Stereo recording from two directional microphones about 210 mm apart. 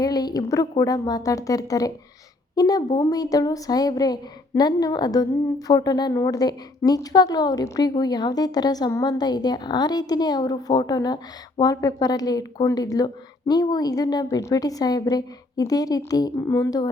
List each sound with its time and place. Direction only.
0.0 s a woman's voice: 20° left (ahead or behind)